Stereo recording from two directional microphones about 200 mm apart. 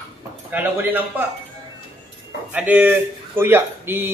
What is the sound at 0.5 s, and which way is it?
Speech, 10° right (ahead or behind).